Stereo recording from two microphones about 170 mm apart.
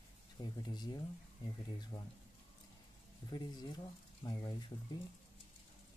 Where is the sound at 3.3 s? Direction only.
25° left (ahead or behind).